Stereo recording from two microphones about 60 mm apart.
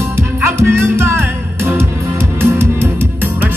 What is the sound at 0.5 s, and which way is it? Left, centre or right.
Music, right.